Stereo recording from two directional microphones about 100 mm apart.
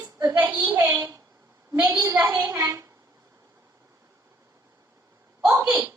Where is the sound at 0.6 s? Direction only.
30° right (ahead or behind).